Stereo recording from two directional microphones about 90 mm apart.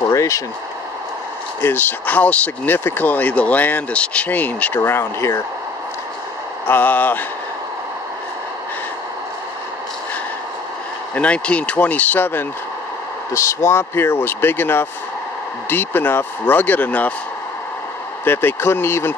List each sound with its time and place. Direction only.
0.1 s speech: 35° left (ahead or behind)
1.6 s speech: 20° left (ahead or behind)
6.7 s speech: 20° left (ahead or behind)
11.1 s speech: 15° left (ahead or behind)
13.3 s speech: 35° left (ahead or behind); by 17.1 s 15° left (ahead or behind)
18.2 s speech: 25° left (ahead or behind)